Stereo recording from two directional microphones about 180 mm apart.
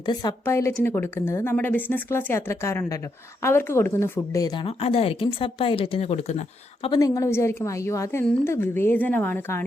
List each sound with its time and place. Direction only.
0.0 s a woman's voice: 25° left (ahead or behind)
4.6 s speech: 30° left (ahead or behind)
6.8 s a woman's voice: 20° left (ahead or behind)